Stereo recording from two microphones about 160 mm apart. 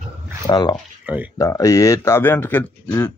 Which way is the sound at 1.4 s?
20° left (ahead or behind).